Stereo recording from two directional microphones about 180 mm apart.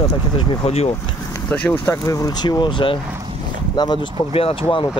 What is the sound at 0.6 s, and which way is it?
Speech, 35° left (ahead or behind).